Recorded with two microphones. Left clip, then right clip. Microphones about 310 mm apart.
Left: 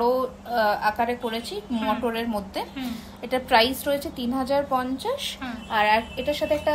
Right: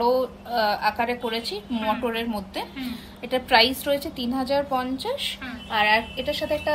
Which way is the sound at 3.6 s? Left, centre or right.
Left.